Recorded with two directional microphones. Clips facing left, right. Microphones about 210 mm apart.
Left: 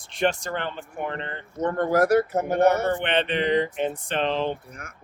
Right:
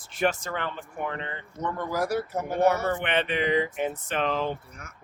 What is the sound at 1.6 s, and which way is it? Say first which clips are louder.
Speech: left 6 dB; 45° left (ahead or behind).